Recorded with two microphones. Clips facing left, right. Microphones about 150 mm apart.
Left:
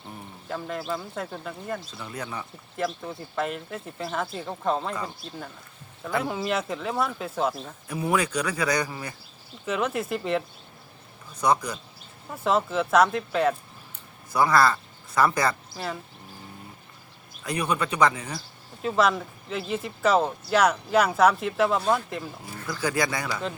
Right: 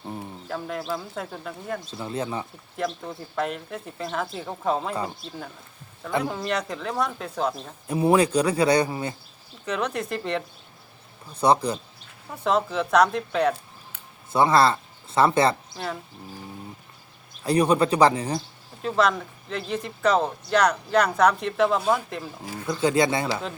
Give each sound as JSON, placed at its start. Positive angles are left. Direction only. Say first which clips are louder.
{"t": 0.4, "sound": "speech", "louder": "even", "side_deg": 0}
{"t": 1.9, "sound": "speech", "louder": "right 6 dB", "side_deg": -25}
{"t": 2.7, "sound": "speech", "louder": "even", "side_deg": 0}
{"t": 7.9, "sound": "speech", "louder": "right 6 dB", "side_deg": -30}
{"t": 9.6, "sound": "speech", "louder": "even", "side_deg": 5}
{"t": 11.3, "sound": "speech", "louder": "right 4 dB", "side_deg": -30}
{"t": 12.3, "sound": "speech", "louder": "right 1 dB", "side_deg": 0}
{"t": 14.3, "sound": "speech", "louder": "right 2 dB", "side_deg": -25}
{"t": 15.7, "sound": "speech", "louder": "right 1 dB", "side_deg": 0}
{"t": 17.4, "sound": "speech", "louder": "right 7 dB", "side_deg": -35}
{"t": 18.8, "sound": "speech", "louder": "even", "side_deg": 0}
{"t": 22.6, "sound": "speech", "louder": "right 5 dB", "side_deg": -20}